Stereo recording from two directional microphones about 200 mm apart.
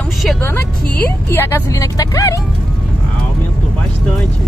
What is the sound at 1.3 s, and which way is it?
Speech, 15° left (ahead or behind).